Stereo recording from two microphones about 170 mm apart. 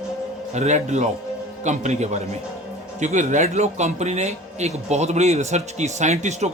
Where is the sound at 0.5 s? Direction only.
45° right (ahead or behind).